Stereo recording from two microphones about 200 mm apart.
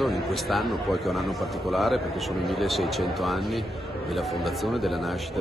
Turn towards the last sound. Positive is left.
turn(degrees=0)  # may be behind; listen again after turning